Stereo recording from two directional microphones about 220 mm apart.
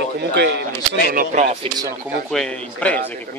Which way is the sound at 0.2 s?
50° right (ahead or behind).